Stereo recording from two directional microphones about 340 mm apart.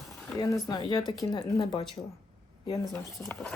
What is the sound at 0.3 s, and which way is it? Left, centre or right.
Speech, centre.